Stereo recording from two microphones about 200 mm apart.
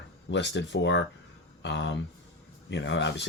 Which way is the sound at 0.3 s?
65° left (ahead or behind).